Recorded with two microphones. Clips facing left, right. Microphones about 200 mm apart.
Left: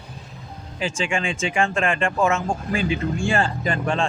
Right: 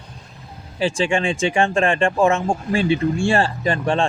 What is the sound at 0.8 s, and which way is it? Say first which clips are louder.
Speech: right 5 dB; 30° right (ahead or behind).